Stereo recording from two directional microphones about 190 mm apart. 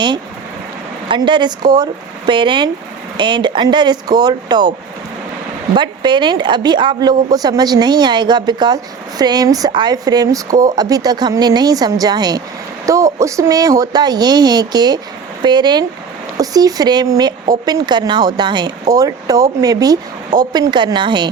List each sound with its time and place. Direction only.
1.0 s speech: 25° right (ahead or behind)
5.7 s speech: 25° right (ahead or behind)